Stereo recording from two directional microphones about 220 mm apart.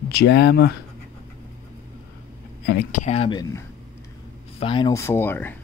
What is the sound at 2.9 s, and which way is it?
Speech, 30° left (ahead or behind).